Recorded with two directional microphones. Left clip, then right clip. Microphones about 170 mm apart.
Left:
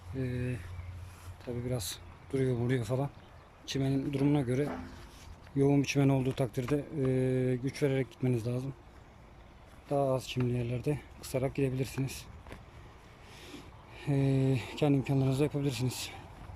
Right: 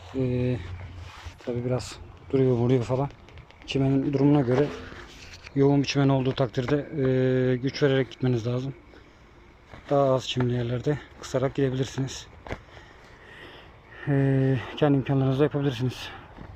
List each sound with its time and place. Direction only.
0.2 s speech: 15° right (ahead or behind)
1.5 s speech: 5° right (ahead or behind)
5.5 s speech: 10° left (ahead or behind)
9.9 s speech: centre (ahead or behind)
14.0 s speech: 5° left (ahead or behind)